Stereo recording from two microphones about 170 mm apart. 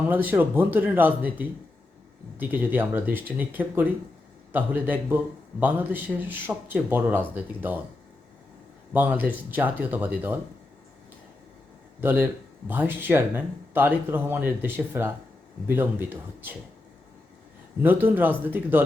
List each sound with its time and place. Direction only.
0.0 s a man's voice: 10° right (ahead or behind)
8.9 s a man's voice: 10° right (ahead or behind)
11.9 s a man's voice: 10° right (ahead or behind)
18.0 s a man's voice: 10° right (ahead or behind)